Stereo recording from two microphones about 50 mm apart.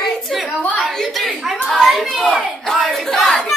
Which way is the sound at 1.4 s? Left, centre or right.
Centre.